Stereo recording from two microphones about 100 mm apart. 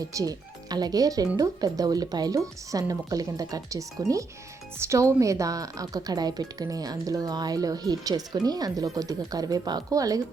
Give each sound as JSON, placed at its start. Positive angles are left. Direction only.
{"t": 0.0, "sound": "speech", "side_deg": -35}